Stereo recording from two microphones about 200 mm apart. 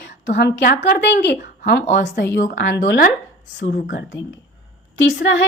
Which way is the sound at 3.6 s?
50° left (ahead or behind).